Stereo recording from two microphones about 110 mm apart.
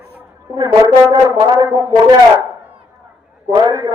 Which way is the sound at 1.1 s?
40° right (ahead or behind).